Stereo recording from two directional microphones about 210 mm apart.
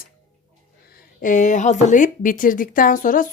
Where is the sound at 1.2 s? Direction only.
35° left (ahead or behind).